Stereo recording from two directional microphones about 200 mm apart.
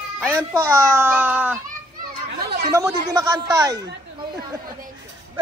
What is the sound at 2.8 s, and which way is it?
A man's voice, 15° right (ahead or behind).